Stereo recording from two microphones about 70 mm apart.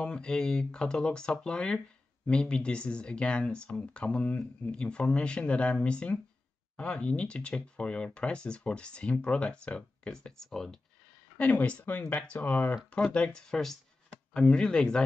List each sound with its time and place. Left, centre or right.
0.0 s speech: centre
11.3 s speech: centre